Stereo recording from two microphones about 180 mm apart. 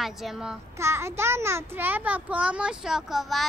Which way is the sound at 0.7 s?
15° right (ahead or behind).